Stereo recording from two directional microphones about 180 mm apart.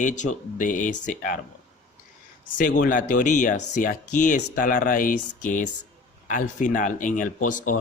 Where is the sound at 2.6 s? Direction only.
50° left (ahead or behind).